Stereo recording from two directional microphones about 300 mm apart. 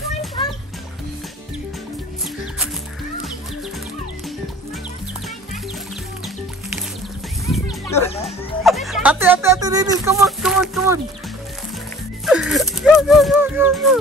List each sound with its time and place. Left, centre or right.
0.4 s music: centre
7.6 s a sound: centre
8.6 s speech: centre
12.3 s speech: centre